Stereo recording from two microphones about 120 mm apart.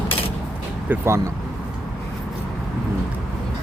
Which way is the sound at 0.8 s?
20° right (ahead or behind).